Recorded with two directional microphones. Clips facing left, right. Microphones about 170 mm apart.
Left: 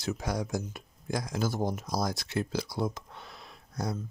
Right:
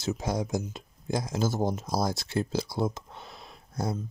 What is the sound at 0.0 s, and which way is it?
Speech, 25° right (ahead or behind).